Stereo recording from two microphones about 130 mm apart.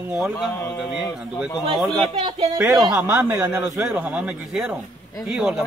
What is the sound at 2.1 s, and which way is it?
Speech, 40° right (ahead or behind).